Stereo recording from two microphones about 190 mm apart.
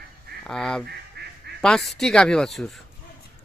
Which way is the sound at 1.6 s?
Centre (ahead or behind).